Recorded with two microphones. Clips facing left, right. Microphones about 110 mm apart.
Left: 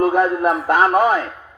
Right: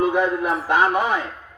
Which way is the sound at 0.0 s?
50° left (ahead or behind).